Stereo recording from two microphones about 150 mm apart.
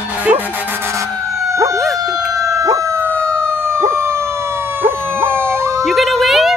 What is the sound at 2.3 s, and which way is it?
Howl, 20° right (ahead or behind).